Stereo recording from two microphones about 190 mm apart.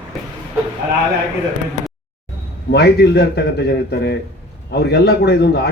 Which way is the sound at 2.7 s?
60° left (ahead or behind).